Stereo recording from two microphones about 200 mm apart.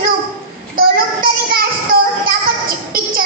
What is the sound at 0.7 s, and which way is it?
Child singing, 45° right (ahead or behind).